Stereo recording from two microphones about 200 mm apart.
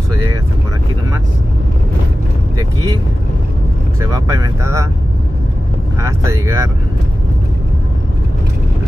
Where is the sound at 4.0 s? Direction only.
15° right (ahead or behind).